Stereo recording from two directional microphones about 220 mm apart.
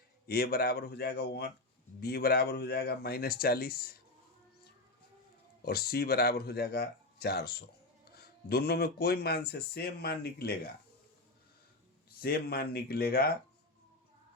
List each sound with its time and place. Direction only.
0.3 s speech: 45° left (ahead or behind)
5.6 s speech: 45° left (ahead or behind)
12.2 s speech: 45° left (ahead or behind)